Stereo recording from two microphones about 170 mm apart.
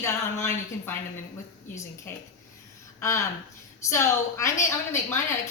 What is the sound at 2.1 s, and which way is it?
A woman's voice, 15° left (ahead or behind).